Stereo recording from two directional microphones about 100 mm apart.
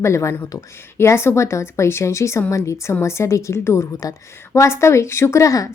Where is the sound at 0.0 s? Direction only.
30° left (ahead or behind).